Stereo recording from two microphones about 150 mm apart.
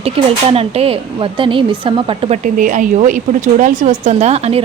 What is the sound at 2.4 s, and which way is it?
Speech, 60° right (ahead or behind).